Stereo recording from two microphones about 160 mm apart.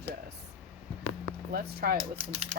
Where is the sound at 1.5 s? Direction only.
80° right.